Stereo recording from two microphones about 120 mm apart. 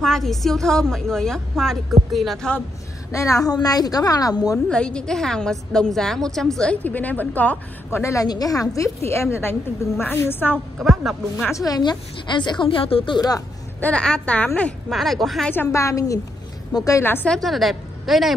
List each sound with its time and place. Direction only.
0.0 s a woman's voice: 5° left (ahead or behind)
3.1 s a woman's voice: 25° left (ahead or behind)
4.6 s a woman's voice: 5° left (ahead or behind)
8.0 s a woman's voice: 25° left (ahead or behind)
10.8 s a woman's voice: centre (ahead or behind)
11.4 s a woman's voice: 30° left (ahead or behind)
13.7 s a woman's voice: 10° left (ahead or behind)
14.9 s a woman's voice: centre (ahead or behind)
15.5 s a woman's voice: 20° left (ahead or behind)
17.0 s a woman's voice: 15° left (ahead or behind)
17.3 s a woman's voice: centre (ahead or behind)